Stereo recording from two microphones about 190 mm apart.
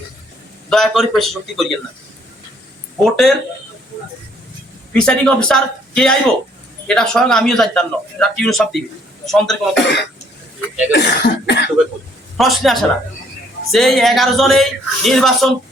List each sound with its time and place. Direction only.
0.7 s a man's voice: centre (ahead or behind)
3.0 s a man's voice: centre (ahead or behind)
4.9 s a man's voice: 5° left (ahead or behind)
9.7 s cough: 65° left (ahead or behind)
12.4 s a man's voice: centre (ahead or behind)